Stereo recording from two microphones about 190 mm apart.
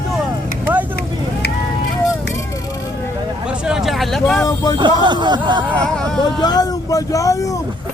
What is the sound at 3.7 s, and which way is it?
Vehicle, centre (ahead or behind).